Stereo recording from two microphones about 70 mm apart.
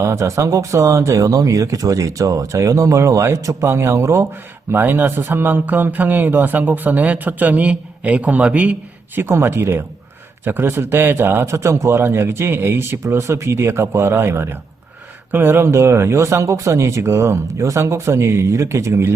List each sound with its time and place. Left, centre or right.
0.0 s speech: right
4.7 s speech: right
9.1 s a man's voice: right